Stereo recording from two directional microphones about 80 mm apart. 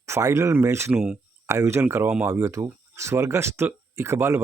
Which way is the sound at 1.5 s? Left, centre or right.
Right.